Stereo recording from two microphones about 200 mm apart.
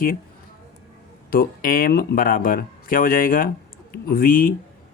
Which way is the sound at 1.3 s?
45° left (ahead or behind).